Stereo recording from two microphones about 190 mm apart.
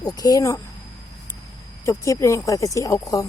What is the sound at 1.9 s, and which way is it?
Speech, 15° left (ahead or behind).